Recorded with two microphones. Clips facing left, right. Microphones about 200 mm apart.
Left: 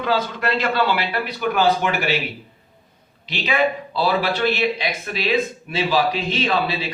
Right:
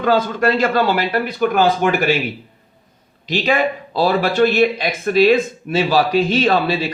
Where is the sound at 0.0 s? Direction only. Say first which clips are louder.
Right 6 dB; 45° right (ahead or behind).